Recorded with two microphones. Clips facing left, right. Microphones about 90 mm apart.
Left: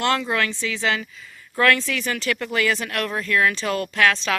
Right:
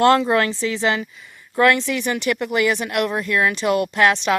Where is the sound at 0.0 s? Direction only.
30° right (ahead or behind).